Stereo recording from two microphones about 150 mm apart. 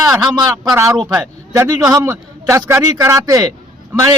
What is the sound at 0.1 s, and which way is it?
A man's voice, 25° right (ahead or behind).